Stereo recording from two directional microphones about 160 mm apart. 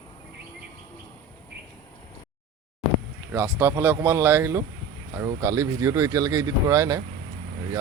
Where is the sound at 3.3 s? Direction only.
15° right (ahead or behind).